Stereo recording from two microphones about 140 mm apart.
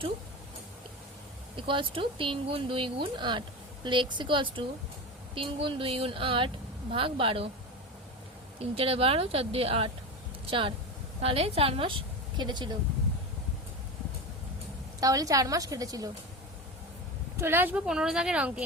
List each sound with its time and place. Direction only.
1.5 s speech: 35° right (ahead or behind)
8.5 s a woman's voice: 40° right (ahead or behind)
15.0 s a woman's voice: 25° right (ahead or behind)
17.4 s speech: 15° right (ahead or behind)